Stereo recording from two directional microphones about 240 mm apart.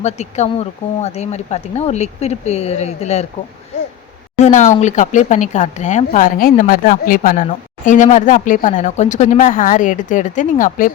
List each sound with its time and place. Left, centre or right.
0.0 s speech: left
4.4 s speech: left